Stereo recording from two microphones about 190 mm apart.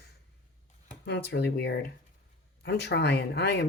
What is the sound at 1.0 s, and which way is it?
Speech, 60° left (ahead or behind).